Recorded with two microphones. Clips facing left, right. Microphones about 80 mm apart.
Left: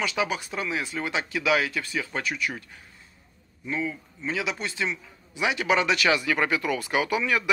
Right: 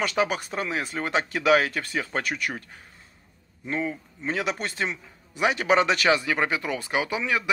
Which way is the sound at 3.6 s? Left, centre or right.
Right.